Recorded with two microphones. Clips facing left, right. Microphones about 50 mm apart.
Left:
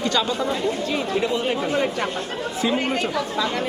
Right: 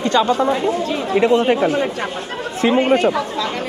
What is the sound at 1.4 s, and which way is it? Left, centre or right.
Speech, right.